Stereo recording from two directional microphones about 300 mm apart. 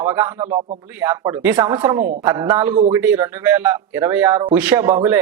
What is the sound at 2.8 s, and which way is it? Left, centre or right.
Speech, centre.